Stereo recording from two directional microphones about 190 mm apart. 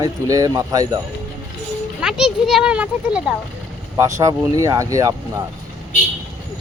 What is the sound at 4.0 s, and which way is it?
Speech, 15° right (ahead or behind).